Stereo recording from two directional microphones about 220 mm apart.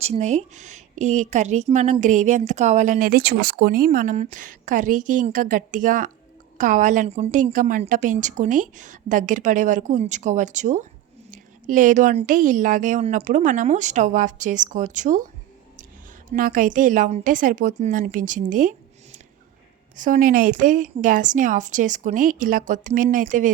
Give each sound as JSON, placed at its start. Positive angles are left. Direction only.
{"t": 0.0, "sound": "a woman's voice", "side_deg": -30}
{"t": 16.3, "sound": "a woman's voice", "side_deg": -40}
{"t": 20.0, "sound": "a woman's voice", "side_deg": -40}